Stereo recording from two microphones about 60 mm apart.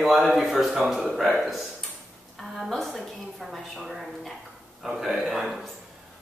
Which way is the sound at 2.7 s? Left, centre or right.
Centre.